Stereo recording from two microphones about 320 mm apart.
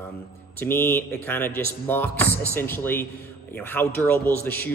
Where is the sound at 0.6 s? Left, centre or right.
Centre.